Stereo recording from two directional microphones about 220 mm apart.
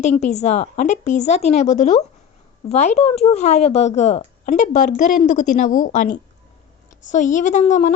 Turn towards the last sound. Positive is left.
turn(degrees=35)  # may be behind; listen again after turning